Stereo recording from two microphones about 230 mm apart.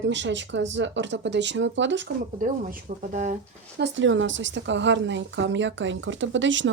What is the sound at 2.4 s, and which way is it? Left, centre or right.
Speech, right.